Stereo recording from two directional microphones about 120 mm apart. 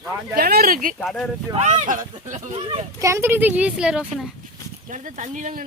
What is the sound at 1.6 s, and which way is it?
Speech, 80° right.